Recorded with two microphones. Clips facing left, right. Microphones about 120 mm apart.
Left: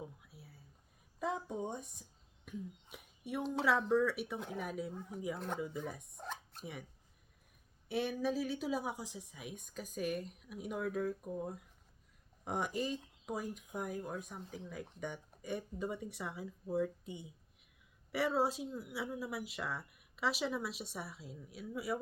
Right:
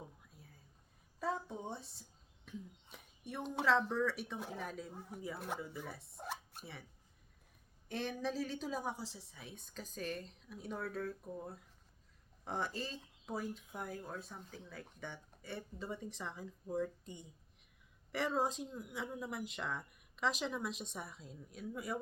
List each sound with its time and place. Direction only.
1.2 s a sound: 15° left (ahead or behind)
3.4 s speech: centre (ahead or behind)
3.7 s a woman's voice: 10° left (ahead or behind)
4.9 s speech: 10° right (ahead or behind)
5.5 s a woman's voice: 15° left (ahead or behind)
6.1 s zipper: 5° right (ahead or behind)
7.9 s a woman's voice: 10° left (ahead or behind)